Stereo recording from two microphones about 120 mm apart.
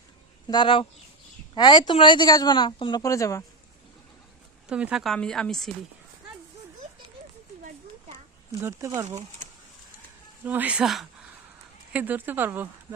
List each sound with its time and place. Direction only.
0.4 s speech: 40° left (ahead or behind)
3.0 s speech: 25° left (ahead or behind)
4.7 s speech: 10° right (ahead or behind)
9.0 s speech: 65° right (ahead or behind)
10.4 s speech: 15° right (ahead or behind)
11.9 s speech: 15° right (ahead or behind)